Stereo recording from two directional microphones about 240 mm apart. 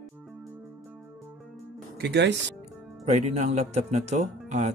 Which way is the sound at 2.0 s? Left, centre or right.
Right.